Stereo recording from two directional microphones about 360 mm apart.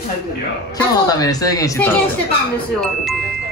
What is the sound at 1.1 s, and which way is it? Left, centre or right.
Speech, centre.